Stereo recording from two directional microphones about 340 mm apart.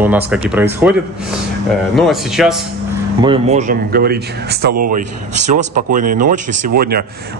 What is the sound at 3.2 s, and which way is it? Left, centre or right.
Speech, centre.